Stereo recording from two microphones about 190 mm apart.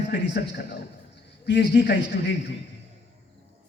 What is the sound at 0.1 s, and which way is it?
A man's voice, 60° left (ahead or behind).